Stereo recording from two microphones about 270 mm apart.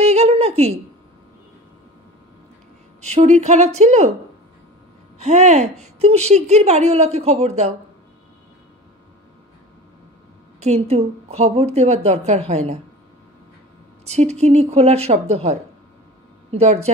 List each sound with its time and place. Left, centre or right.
0.0 s a sound: right
3.0 s a woman's voice: right
5.2 s a woman's voice: right
10.6 s a woman's voice: right
14.0 s a woman's voice: right